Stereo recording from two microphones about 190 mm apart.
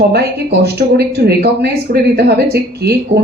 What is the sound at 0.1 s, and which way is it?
Speech, 55° right (ahead or behind).